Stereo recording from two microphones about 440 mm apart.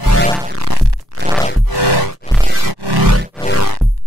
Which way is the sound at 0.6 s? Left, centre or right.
Right.